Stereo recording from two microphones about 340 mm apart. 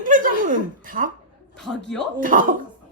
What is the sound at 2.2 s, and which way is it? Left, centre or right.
Speech, right.